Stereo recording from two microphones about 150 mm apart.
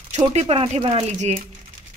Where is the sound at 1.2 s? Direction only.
50° right (ahead or behind).